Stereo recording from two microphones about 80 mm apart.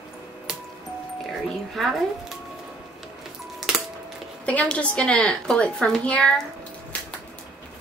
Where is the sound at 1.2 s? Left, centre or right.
Centre.